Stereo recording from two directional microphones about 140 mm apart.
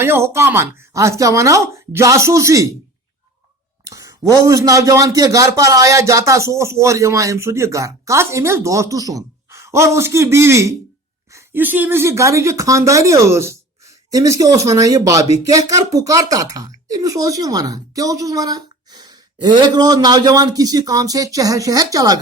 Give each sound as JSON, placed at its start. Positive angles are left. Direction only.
{"t": 0.0, "sound": "speech", "side_deg": -15}
{"t": 3.8, "sound": "speech", "side_deg": -25}